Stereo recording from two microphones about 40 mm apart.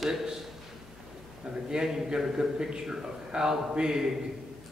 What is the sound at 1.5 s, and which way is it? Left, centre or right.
Speech, right.